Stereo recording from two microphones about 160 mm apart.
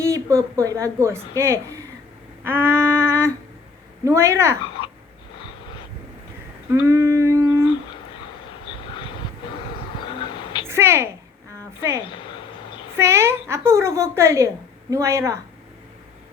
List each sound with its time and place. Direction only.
0.0 s a woman's voice: 20° right (ahead or behind)
6.7 s a sound: 15° right (ahead or behind)
8.6 s vehicle: 30° left (ahead or behind)
10.1 s a sound: 30° left (ahead or behind)
10.7 s a woman's voice: 15° right (ahead or behind)
12.0 s speech: 30° left (ahead or behind)
13.0 s a woman's voice: 15° right (ahead or behind)